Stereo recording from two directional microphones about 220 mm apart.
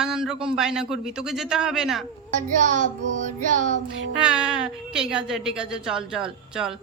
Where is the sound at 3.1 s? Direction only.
35° right (ahead or behind).